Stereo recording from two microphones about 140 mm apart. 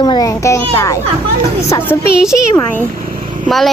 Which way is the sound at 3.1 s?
75° right (ahead or behind).